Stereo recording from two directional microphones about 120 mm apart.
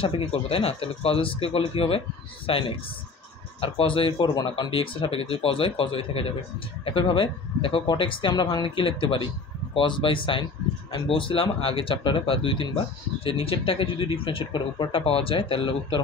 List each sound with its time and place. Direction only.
0.0 s speech: 50° left (ahead or behind)
3.6 s speech: 50° left (ahead or behind)